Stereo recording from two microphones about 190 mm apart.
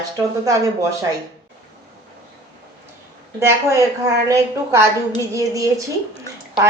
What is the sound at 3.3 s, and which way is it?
A woman's voice, 15° right (ahead or behind).